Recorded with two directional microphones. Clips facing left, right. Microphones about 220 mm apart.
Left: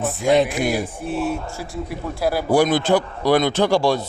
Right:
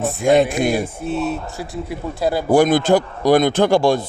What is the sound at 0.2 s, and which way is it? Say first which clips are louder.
Speech: right 3 dB; 50° right (ahead or behind).